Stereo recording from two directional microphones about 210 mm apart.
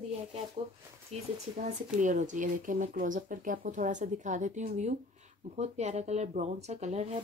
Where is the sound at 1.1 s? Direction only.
30° right (ahead or behind).